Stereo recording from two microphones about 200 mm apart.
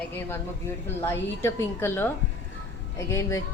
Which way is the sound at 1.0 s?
10° left (ahead or behind).